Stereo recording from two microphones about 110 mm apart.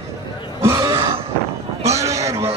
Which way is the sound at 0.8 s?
40° right (ahead or behind).